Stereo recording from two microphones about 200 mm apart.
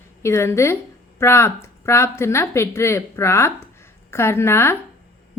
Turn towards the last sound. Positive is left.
turn(degrees=10)  # may be behind; listen again after turning